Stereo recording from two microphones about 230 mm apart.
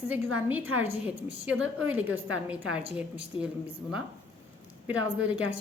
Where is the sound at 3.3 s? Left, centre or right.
Left.